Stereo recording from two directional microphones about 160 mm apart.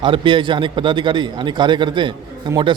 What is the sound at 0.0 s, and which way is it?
A man's voice, 30° right (ahead or behind).